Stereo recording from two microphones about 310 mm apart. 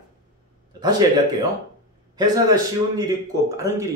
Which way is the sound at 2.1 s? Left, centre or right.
Centre.